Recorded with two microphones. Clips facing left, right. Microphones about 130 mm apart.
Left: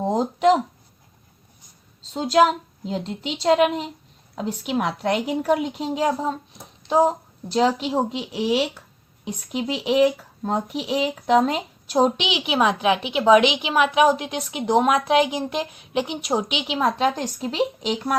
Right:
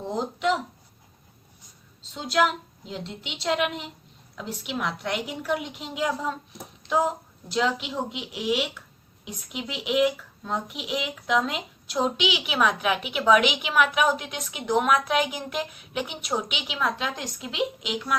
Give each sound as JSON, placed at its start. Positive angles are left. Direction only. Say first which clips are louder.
{"t": 0.0, "sound": "speech", "louder": "left 8 dB", "side_deg": 45}
{"t": 2.1, "sound": "a woman's voice", "louder": "left 6 dB", "side_deg": 40}